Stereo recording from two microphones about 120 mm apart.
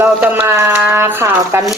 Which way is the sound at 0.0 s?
20° right (ahead or behind).